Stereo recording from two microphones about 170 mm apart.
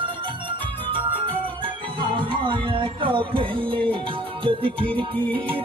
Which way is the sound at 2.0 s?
30° right (ahead or behind).